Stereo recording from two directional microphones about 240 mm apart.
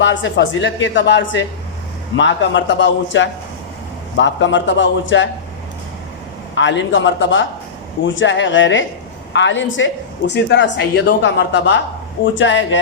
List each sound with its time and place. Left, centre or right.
0.0 s speech: left
6.6 s speech: left